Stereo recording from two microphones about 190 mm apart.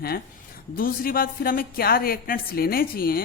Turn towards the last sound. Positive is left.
turn(degrees=50)  # may be behind; listen again after turning